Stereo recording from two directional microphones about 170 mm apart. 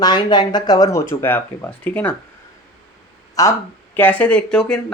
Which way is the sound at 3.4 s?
20° left (ahead or behind).